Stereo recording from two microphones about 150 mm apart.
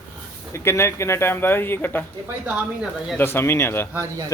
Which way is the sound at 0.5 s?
15° left (ahead or behind).